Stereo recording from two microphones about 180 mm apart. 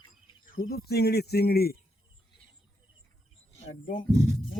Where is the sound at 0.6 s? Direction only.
60° left (ahead or behind).